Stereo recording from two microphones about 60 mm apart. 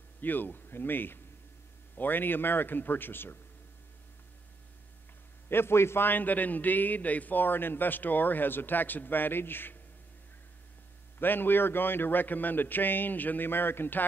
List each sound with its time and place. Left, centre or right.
0.2 s a man's voice: left
5.5 s a man's voice: left
11.1 s a man's voice: left